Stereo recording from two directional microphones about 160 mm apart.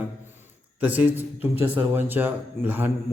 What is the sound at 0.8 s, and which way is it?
Speech, 10° right (ahead or behind).